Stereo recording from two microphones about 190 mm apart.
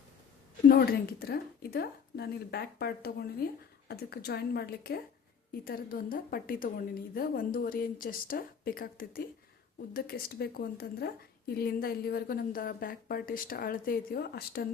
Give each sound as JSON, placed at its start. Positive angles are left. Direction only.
{"t": 0.7, "sound": "a woman's voice", "side_deg": 55}